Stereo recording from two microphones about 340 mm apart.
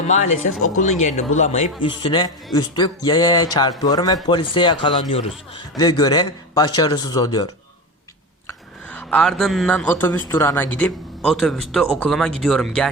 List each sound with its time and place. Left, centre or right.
0.8 s a man's voice: left; by 12.9 s centre